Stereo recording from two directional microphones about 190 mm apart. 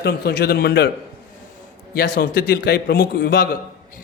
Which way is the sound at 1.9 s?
55° left (ahead or behind).